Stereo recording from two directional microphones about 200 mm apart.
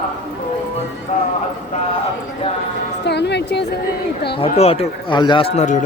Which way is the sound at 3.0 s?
55° left (ahead or behind).